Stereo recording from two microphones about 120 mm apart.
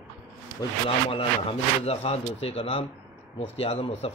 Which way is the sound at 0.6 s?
30° left (ahead or behind).